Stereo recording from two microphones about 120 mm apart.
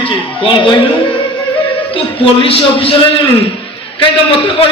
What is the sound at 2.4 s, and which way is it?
Speech, 50° left (ahead or behind).